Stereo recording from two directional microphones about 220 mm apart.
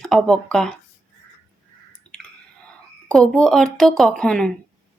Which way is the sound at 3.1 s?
Centre (ahead or behind).